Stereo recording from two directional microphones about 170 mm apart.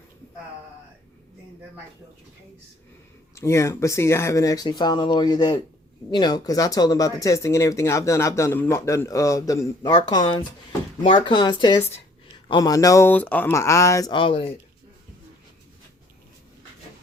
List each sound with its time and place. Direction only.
3.3 s speech: 15° left (ahead or behind)